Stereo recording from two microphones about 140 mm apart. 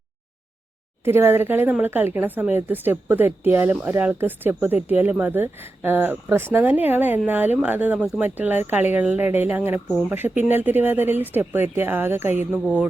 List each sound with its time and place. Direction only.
1.0 s speech: 15° right (ahead or behind)